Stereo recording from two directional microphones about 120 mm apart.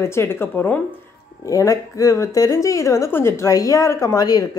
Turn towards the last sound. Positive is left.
turn(degrees=30)  # may be behind; listen again after turning